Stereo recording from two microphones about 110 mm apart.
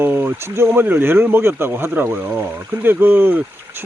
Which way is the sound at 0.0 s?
20° right (ahead or behind).